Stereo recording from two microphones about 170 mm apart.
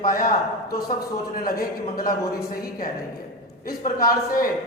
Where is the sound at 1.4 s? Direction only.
60° left (ahead or behind).